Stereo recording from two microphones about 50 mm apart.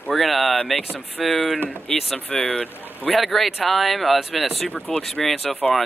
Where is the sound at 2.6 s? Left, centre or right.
Left.